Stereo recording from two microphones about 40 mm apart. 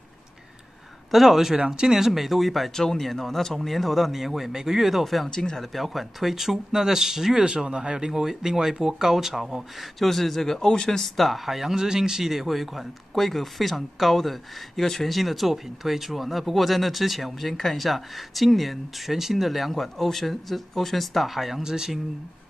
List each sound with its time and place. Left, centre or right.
1.1 s speech: centre
2.7 s speech: centre
5.3 s speech: centre
5.6 s speech: centre
7.4 s speech: right; by 21.6 s centre
21.6 s speech: centre